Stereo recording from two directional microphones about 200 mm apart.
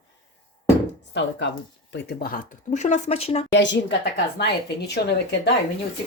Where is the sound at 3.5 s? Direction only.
60° left (ahead or behind).